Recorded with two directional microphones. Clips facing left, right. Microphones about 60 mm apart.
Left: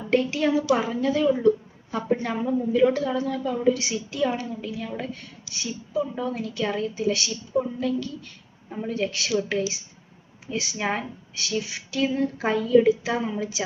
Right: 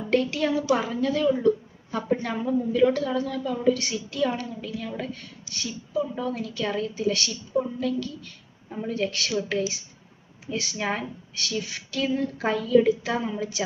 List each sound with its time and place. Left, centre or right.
0.0 s a woman's voice: centre
10.4 s speech: centre